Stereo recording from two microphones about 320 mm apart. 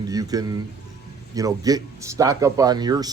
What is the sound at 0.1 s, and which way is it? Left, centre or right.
Speech, centre.